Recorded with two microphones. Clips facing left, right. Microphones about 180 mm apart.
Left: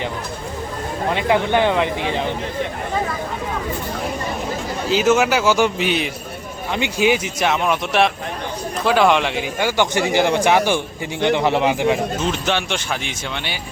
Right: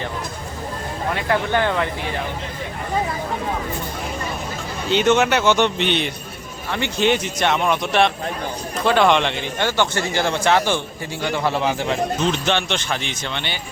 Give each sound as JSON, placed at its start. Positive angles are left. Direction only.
{"t": 1.1, "sound": "a man's voice", "side_deg": 20}
{"t": 4.9, "sound": "a man's voice", "side_deg": 5}
{"t": 6.7, "sound": "a man's voice", "side_deg": 15}